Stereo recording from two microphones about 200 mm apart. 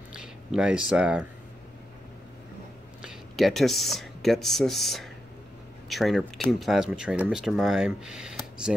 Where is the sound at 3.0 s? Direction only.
Centre (ahead or behind).